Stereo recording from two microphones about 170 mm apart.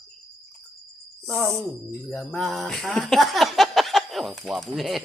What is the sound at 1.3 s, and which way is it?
Mantra, centre (ahead or behind).